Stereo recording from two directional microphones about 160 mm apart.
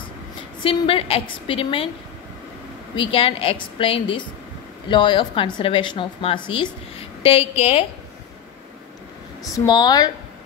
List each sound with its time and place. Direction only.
0.6 s a woman's voice: 35° left (ahead or behind)
3.0 s a woman's voice: 35° left (ahead or behind)
9.4 s speech: 25° left (ahead or behind)